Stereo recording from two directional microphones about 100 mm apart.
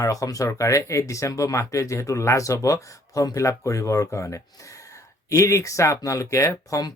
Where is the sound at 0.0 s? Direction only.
35° left (ahead or behind).